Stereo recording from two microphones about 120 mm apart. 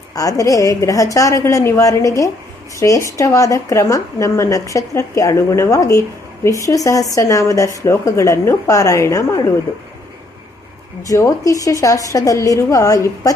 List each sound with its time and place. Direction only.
0.1 s a woman's voice: 30° left (ahead or behind)
11.1 s a woman's voice: 30° left (ahead or behind)